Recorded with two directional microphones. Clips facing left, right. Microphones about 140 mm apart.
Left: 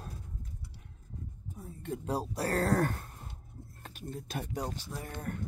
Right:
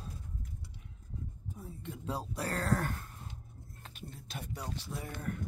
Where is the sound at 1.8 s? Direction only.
45° left (ahead or behind).